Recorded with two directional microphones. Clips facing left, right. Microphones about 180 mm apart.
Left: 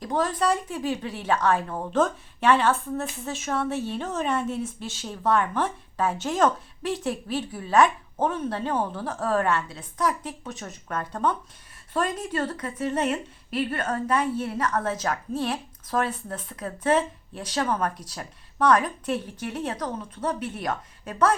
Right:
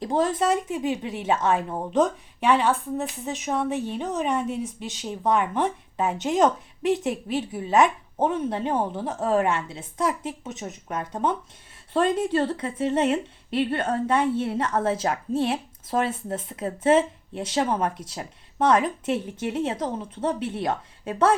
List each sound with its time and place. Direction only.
0.0 s a woman's voice: 25° right (ahead or behind)